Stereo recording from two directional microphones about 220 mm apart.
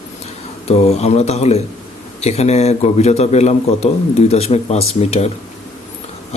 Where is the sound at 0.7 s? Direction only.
30° left (ahead or behind).